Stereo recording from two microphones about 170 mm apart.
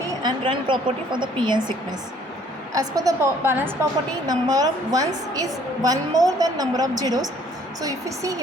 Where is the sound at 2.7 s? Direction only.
20° right (ahead or behind).